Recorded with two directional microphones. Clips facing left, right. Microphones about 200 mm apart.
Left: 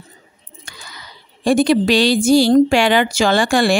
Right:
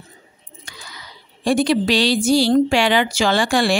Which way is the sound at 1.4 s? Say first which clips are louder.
Left 3 dB; 50° left (ahead or behind).